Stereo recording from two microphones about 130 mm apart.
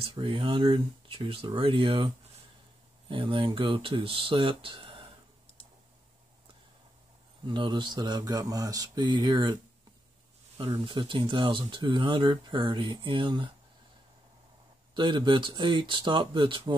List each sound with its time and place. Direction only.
0.0 s speech: 40° right (ahead or behind)
7.4 s speech: 35° right (ahead or behind)
10.6 s speech: 40° right (ahead or behind)
15.0 s speech: 35° right (ahead or behind)